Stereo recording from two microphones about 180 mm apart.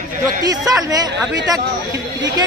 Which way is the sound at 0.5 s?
20° right (ahead or behind).